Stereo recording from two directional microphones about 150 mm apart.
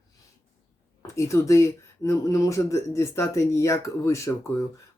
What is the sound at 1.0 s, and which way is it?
Speech, 20° left (ahead or behind).